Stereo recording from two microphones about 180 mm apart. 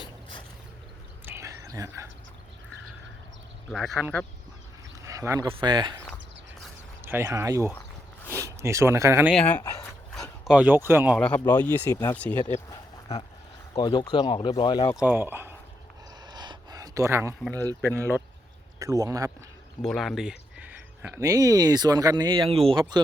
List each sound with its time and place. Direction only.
1.2 s a sound: 15° right (ahead or behind)
3.7 s speech: centre (ahead or behind)
5.0 s a sound: 15° right (ahead or behind)
5.5 s speech: 25° right (ahead or behind)
7.0 s speech: 15° right (ahead or behind)
9.3 s a man's voice: 5° left (ahead or behind)
11.3 s speech: 10° left (ahead or behind)
13.7 s speech: 20° left (ahead or behind)
14.9 s speech: 10° right (ahead or behind)
16.2 s a sound: 25° right (ahead or behind)
17.9 s speech: 10° left (ahead or behind)
18.8 s speech: 20° right (ahead or behind)
19.8 s speech: centre (ahead or behind); by 23.0 s 25° right (ahead or behind)